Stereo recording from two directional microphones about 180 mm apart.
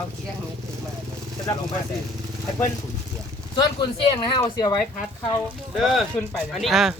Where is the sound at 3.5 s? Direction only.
25° left (ahead or behind).